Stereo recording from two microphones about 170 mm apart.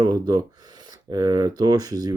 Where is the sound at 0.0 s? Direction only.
25° right (ahead or behind).